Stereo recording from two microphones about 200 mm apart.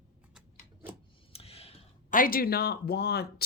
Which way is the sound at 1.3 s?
30° left (ahead or behind).